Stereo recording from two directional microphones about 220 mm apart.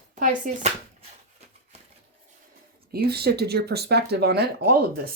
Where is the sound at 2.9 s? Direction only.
45° right (ahead or behind).